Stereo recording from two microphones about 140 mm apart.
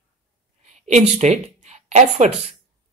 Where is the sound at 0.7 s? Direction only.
55° right (ahead or behind).